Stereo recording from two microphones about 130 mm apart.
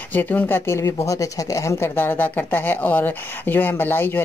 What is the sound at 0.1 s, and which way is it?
Speech, 15° left (ahead or behind).